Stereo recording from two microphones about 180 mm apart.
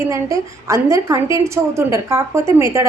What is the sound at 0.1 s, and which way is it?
A woman's voice, 15° right (ahead or behind).